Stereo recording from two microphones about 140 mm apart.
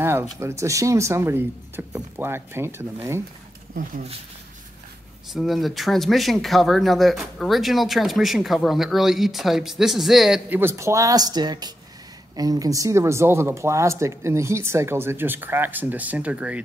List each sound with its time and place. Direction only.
0.0 s speech: 20° right (ahead or behind)
5.3 s speech: centre (ahead or behind)
10.6 s speech: 20° right (ahead or behind)